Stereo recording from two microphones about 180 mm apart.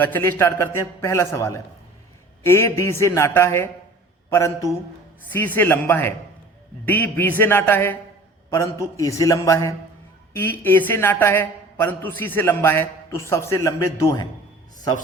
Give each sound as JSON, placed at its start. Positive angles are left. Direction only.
{"t": 0.0, "sound": "a man's voice", "side_deg": 10}